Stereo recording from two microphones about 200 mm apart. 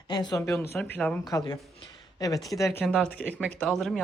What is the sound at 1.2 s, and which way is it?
Speech, 15° left (ahead or behind).